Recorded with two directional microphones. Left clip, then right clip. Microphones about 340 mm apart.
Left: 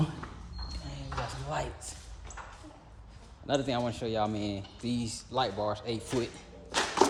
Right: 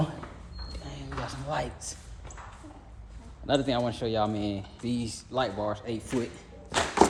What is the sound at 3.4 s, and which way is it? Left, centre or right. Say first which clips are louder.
Speech: right 4 dB; centre.